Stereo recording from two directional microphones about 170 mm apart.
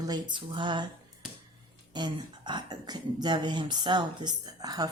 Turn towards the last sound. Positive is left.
turn(degrees=-20)  # may be behind; listen again after turning